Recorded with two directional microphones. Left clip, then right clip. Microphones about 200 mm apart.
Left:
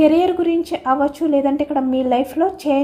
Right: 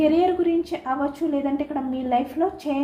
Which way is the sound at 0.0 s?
55° left (ahead or behind).